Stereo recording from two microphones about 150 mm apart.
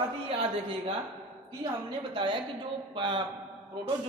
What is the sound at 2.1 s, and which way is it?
A man's voice, 35° right (ahead or behind).